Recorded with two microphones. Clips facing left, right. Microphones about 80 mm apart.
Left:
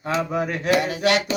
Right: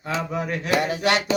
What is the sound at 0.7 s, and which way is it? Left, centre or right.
Mantra, right.